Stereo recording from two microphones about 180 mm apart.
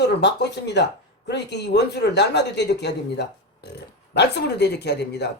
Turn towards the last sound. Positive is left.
turn(degrees=70)  # may be behind; listen again after turning